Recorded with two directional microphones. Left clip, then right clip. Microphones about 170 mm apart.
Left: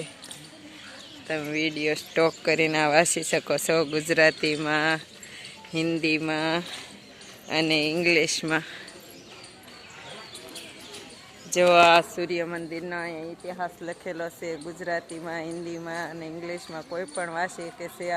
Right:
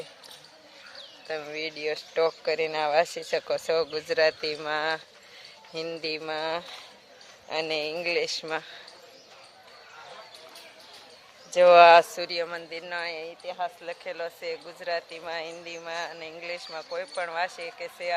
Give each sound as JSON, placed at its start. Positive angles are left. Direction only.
{"t": 1.3, "sound": "speech", "side_deg": 0}
{"t": 11.7, "sound": "speech", "side_deg": -65}
{"t": 12.3, "sound": "speech", "side_deg": -15}